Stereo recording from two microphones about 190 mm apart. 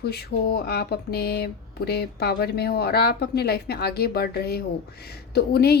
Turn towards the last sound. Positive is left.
turn(degrees=55)  # may be behind; listen again after turning